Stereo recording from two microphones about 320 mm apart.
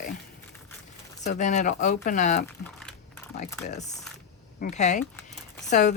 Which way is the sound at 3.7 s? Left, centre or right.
Left.